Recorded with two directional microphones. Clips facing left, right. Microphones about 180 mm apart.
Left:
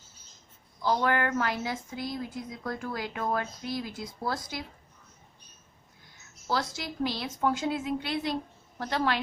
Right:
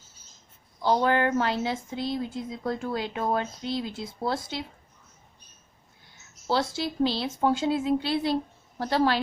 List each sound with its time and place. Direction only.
0.8 s speech: 25° right (ahead or behind)
6.5 s a woman's voice: 30° right (ahead or behind)